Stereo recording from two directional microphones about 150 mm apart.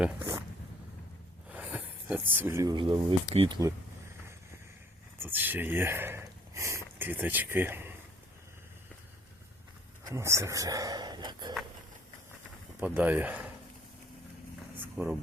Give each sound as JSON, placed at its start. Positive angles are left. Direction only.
{"t": 1.5, "sound": "a sound", "side_deg": -10}
{"t": 2.7, "sound": "speech", "side_deg": -35}
{"t": 5.2, "sound": "speech", "side_deg": -15}
{"t": 10.0, "sound": "speech", "side_deg": -20}
{"t": 12.8, "sound": "speech", "side_deg": -10}
{"t": 14.8, "sound": "a sound", "side_deg": -5}